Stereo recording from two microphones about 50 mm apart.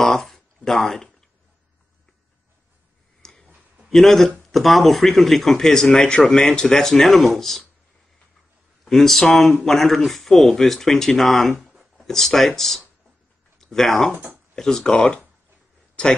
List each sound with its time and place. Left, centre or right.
0.0 s a sound: centre
3.2 s tick-tock: centre
3.9 s speech: centre
8.8 s speech: centre
11.6 s a sound: centre
12.1 s speech: centre